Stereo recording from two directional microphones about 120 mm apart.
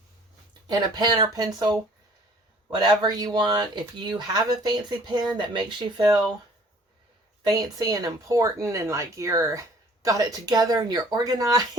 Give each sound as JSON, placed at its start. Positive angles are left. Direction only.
{"t": 0.7, "sound": "speech", "side_deg": -35}
{"t": 7.4, "sound": "speech", "side_deg": -35}